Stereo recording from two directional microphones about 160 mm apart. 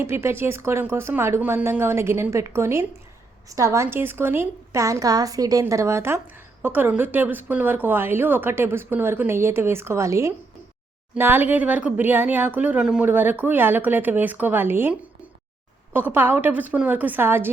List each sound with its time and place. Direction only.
0.0 s a woman's voice: 15° right (ahead or behind)